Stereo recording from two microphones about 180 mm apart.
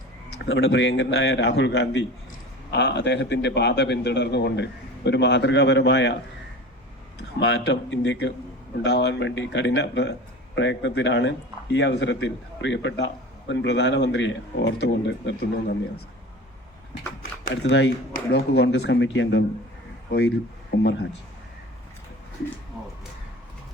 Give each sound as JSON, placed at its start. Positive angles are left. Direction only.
{"t": 0.4, "sound": "a man's voice", "side_deg": 90}
{"t": 7.2, "sound": "speech", "side_deg": 90}
{"t": 8.8, "sound": "a man's voice", "side_deg": 75}
{"t": 13.5, "sound": "a man's voice", "side_deg": 75}
{"t": 17.5, "sound": "speech", "side_deg": 90}
{"t": 18.1, "sound": "a man's voice", "side_deg": 65}
{"t": 20.1, "sound": "speech", "side_deg": 70}